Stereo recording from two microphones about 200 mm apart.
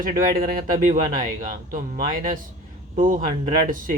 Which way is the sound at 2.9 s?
35° right (ahead or behind).